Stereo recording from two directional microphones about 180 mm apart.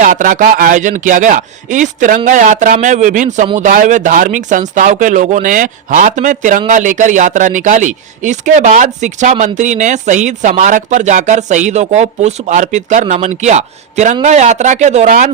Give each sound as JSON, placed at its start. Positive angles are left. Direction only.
{"t": 0.0, "sound": "speech", "side_deg": -45}